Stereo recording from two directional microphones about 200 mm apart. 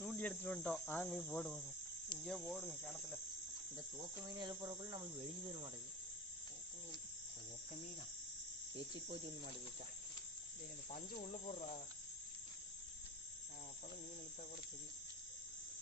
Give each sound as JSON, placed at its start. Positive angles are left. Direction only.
{"t": 0.1, "sound": "cricket", "side_deg": 5}
{"t": 4.2, "sound": "cricket", "side_deg": -20}
{"t": 10.9, "sound": "cricket", "side_deg": 40}